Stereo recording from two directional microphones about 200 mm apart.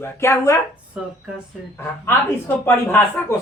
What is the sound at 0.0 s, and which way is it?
Speech, 15° left (ahead or behind).